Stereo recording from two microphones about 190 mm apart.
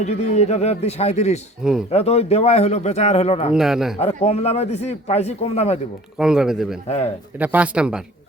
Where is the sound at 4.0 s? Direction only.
30° left (ahead or behind).